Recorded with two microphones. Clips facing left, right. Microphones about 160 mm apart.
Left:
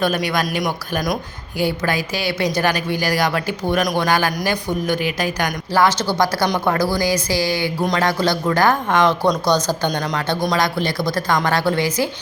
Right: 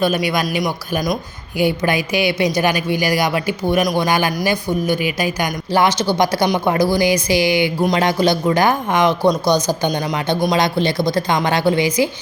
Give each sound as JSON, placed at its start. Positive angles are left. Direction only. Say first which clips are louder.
{"t": 0.3, "sound": "speech", "louder": "right 2 dB", "side_deg": -5}
{"t": 1.5, "sound": "speech", "louder": "right 3 dB", "side_deg": -15}